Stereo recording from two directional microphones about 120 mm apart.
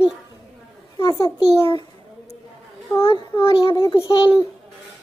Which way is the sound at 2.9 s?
25° left (ahead or behind).